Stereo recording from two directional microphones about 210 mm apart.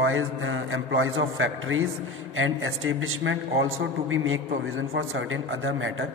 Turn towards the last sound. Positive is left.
turn(degrees=-70)  # may be behind; listen again after turning